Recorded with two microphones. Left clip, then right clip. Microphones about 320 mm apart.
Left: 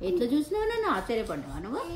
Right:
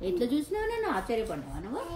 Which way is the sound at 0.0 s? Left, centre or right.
Centre.